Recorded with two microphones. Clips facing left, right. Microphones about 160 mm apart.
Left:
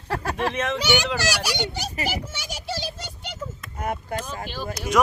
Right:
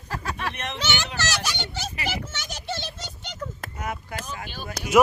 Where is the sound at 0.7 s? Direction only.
10° left (ahead or behind).